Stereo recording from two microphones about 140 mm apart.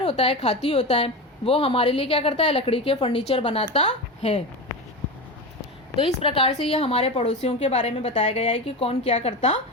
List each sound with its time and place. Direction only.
0.0 s a woman's voice: 45° left (ahead or behind)
6.1 s a woman's voice: 40° left (ahead or behind); by 9.6 s 55° left (ahead or behind)